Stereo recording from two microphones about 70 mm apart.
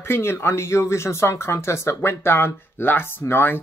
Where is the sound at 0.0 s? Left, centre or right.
Left.